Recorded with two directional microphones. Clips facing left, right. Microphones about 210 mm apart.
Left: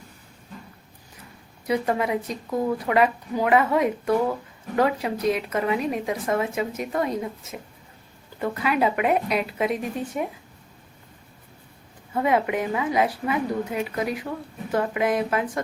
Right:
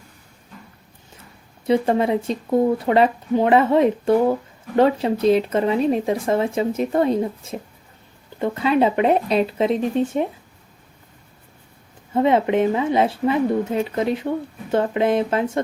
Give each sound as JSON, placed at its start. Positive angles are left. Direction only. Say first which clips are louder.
{"t": 1.6, "sound": "a woman's voice", "louder": "right 6 dB", "side_deg": -25}
{"t": 12.1, "sound": "a woman's voice", "louder": "right 5 dB", "side_deg": -25}